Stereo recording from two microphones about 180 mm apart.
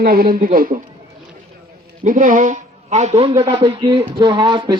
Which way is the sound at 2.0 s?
45° right (ahead or behind).